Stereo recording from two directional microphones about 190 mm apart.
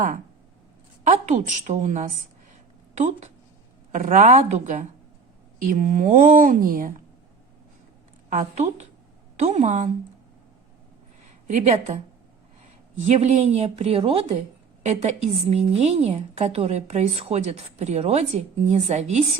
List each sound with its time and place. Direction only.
1.1 s a woman's voice: 40° right (ahead or behind)
8.3 s a woman's voice: 40° right (ahead or behind)
11.4 s a woman's voice: 35° right (ahead or behind)
13.1 s a woman's voice: 35° right (ahead or behind)